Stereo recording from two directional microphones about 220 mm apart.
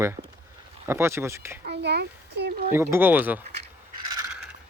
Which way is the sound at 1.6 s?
50° right (ahead or behind).